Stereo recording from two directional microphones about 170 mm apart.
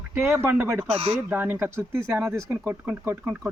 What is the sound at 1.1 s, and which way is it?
Speech, 10° right (ahead or behind).